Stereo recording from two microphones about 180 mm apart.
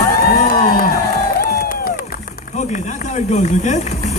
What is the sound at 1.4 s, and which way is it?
Crowd, 55° left (ahead or behind).